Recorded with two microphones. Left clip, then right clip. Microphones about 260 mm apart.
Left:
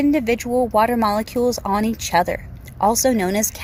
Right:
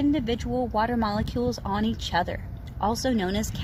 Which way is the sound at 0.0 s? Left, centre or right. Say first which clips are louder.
Left 7 dB; left.